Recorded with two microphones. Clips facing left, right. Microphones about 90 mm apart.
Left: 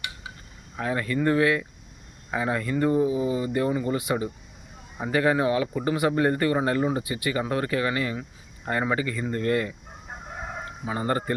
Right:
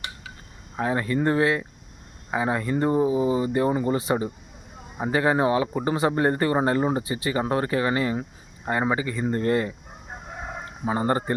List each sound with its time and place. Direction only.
0.8 s speech: 25° right (ahead or behind)